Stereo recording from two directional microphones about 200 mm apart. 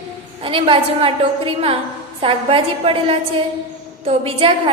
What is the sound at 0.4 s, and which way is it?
A woman's voice, 25° right (ahead or behind).